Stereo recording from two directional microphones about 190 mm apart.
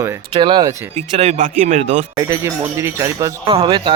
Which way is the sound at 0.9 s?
35° right (ahead or behind).